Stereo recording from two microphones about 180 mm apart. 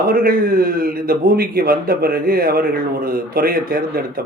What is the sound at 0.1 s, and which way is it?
A man's voice, 55° right (ahead or behind).